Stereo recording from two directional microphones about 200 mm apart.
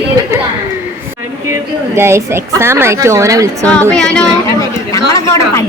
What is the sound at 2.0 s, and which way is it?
A woman's voice, 10° right (ahead or behind).